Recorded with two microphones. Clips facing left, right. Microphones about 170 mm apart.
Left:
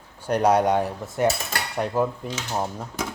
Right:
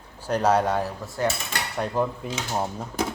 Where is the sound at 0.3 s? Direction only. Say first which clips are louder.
Left 2 dB; 15° left (ahead or behind).